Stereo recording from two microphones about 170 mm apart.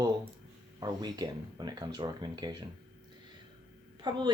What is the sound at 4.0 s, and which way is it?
Speech, 25° right (ahead or behind).